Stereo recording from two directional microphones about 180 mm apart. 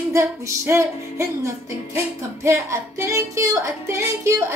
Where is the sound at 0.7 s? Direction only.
15° right (ahead or behind).